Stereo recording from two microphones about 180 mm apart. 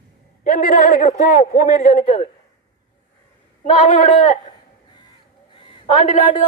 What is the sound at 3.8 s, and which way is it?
Speech, 45° left (ahead or behind).